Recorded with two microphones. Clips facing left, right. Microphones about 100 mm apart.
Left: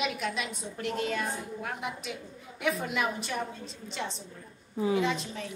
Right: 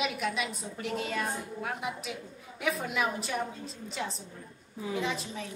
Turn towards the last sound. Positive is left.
turn(degrees=0)  # may be behind; listen again after turning